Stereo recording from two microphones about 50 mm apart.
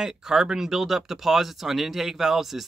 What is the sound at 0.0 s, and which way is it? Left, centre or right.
Speech, centre.